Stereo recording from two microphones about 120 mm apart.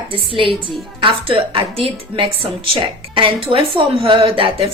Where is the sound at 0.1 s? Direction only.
45° right (ahead or behind).